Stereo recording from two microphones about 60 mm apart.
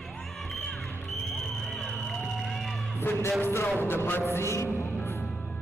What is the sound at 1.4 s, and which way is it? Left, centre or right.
Music, centre.